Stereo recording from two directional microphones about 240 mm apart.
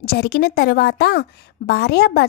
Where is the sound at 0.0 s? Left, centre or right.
Left.